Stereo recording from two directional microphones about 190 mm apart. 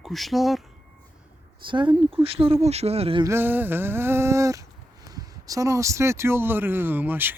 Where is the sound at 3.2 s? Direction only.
10° right (ahead or behind).